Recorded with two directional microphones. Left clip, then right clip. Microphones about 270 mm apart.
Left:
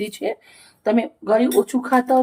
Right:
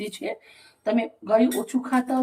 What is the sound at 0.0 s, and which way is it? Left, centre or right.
Speech, centre.